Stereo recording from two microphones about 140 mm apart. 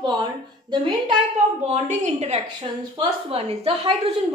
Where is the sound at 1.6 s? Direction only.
55° right (ahead or behind).